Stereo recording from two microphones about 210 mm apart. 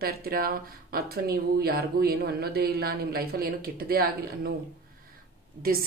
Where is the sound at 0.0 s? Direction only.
45° right (ahead or behind).